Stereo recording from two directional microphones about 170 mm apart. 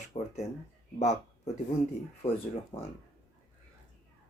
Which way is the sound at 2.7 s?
15° left (ahead or behind).